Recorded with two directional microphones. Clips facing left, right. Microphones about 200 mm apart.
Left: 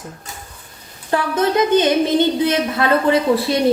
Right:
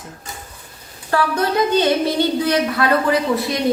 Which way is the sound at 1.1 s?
20° left (ahead or behind).